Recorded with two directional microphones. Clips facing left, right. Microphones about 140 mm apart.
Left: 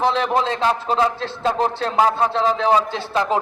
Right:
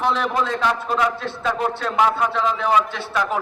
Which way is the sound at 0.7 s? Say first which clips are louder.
Left 2 dB; 30° left (ahead or behind).